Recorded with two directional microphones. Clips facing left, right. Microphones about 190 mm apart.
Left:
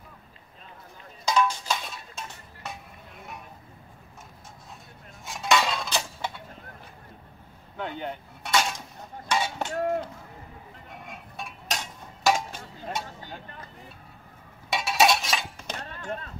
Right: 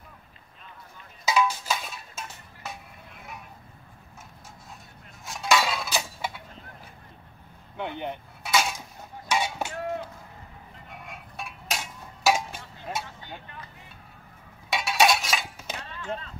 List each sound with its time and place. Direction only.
1.2 s music: 5° right (ahead or behind)
5.2 s cutlery: centre (ahead or behind)
7.7 s vehicle: 15° right (ahead or behind)
8.5 s dishes: 5° right (ahead or behind)
9.3 s a sound: 10° right (ahead or behind)
10.9 s a sound: centre (ahead or behind)
14.7 s chink: centre (ahead or behind)
15.8 s music: 50° left (ahead or behind)